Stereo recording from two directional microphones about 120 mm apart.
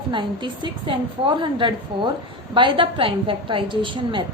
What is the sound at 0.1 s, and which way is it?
A woman's voice, 40° right (ahead or behind).